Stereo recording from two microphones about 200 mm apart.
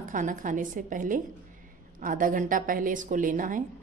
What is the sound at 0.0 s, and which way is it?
A woman's voice, 40° right (ahead or behind).